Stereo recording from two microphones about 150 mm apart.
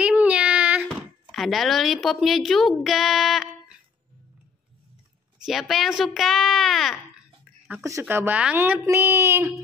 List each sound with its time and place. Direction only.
0.0 s child singing: 10° right (ahead or behind)
1.3 s speech: centre (ahead or behind)
5.4 s speech: centre (ahead or behind)
7.7 s speech: 20° right (ahead or behind)